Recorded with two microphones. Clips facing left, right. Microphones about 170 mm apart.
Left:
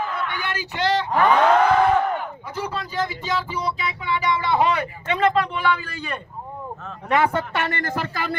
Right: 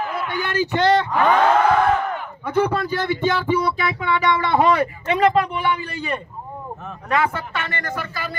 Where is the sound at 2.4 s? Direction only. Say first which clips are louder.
Right 9 dB; 65° right (ahead or behind).